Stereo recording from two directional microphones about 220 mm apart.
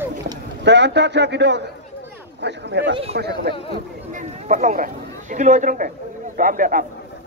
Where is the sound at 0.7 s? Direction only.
50° right (ahead or behind).